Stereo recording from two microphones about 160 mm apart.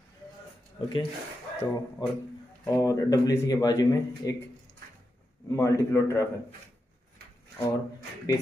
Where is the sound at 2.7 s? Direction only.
20° left (ahead or behind).